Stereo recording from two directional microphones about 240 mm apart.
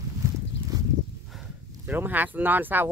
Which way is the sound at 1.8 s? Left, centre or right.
Centre.